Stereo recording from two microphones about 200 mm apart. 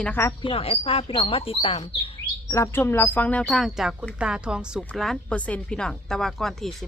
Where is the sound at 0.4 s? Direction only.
30° left (ahead or behind).